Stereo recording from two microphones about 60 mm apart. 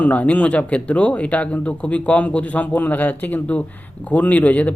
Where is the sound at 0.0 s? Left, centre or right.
Left.